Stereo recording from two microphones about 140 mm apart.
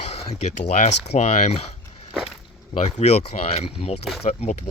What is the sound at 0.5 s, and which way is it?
Speech, 55° left (ahead or behind).